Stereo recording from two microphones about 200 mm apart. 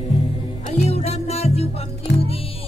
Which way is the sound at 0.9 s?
30° left (ahead or behind).